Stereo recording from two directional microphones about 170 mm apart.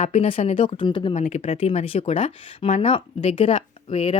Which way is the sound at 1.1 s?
40° left (ahead or behind).